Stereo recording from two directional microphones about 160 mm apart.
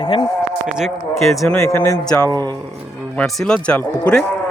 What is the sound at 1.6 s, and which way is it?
Speech, 20° left (ahead or behind).